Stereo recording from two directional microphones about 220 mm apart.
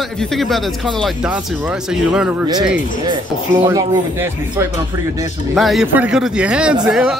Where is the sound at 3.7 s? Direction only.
10° right (ahead or behind).